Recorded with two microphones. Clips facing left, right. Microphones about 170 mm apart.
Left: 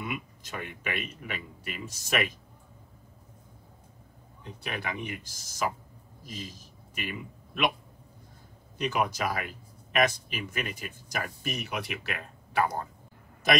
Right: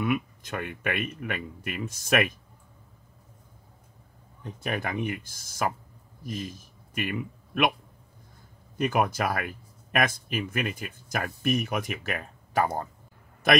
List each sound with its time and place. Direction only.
0.0 s speech: 60° right (ahead or behind)
4.4 s speech: 50° right (ahead or behind)
8.7 s speech: 55° right (ahead or behind)